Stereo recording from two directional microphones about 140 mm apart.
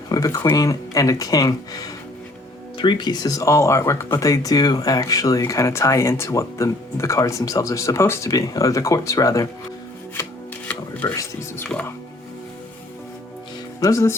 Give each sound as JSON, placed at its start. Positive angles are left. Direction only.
{"t": 0.1, "sound": "speech", "side_deg": 25}
{"t": 11.1, "sound": "speech", "side_deg": 20}
{"t": 13.7, "sound": "speech", "side_deg": 25}